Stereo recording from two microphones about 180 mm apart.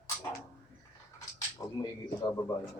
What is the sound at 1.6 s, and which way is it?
Speech, 15° left (ahead or behind).